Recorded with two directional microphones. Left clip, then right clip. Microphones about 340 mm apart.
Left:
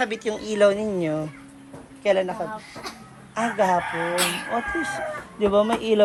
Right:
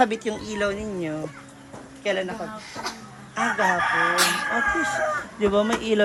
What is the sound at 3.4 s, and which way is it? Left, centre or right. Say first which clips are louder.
Speech: even; centre.